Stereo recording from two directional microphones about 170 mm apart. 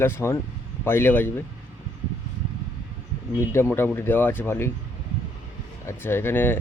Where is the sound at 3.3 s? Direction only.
15° left (ahead or behind).